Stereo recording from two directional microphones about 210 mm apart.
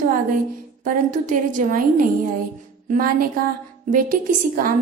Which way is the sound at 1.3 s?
35° right (ahead or behind).